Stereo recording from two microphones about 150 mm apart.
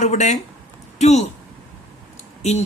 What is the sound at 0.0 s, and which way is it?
Speech, 50° left (ahead or behind).